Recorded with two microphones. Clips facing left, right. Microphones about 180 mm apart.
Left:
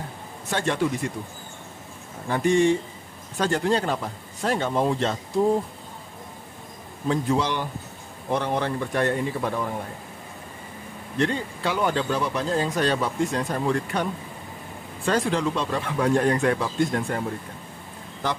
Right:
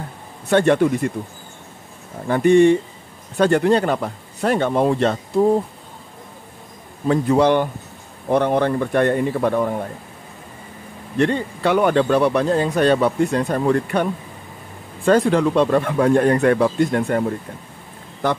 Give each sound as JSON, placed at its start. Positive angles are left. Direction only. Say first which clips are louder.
{"t": 0.5, "sound": "speech", "louder": "right 9 dB", "side_deg": -60}
{"t": 2.2, "sound": "speech", "louder": "right 7 dB", "side_deg": -60}
{"t": 7.1, "sound": "speech", "louder": "right 8 dB", "side_deg": -60}
{"t": 11.1, "sound": "speech", "louder": "right 6 dB", "side_deg": -60}
{"t": 15.0, "sound": "speech", "louder": "right 8 dB", "side_deg": -55}